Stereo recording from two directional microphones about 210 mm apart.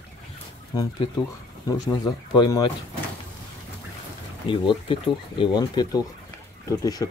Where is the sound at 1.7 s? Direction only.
15° left (ahead or behind).